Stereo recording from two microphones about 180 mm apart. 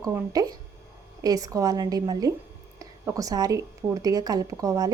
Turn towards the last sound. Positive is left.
turn(degrees=-20)  # may be behind; listen again after turning